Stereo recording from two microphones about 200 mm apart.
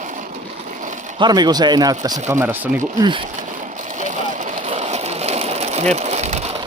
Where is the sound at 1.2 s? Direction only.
20° right (ahead or behind).